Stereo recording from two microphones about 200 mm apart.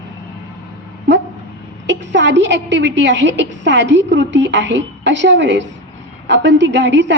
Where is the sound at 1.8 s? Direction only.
60° right (ahead or behind).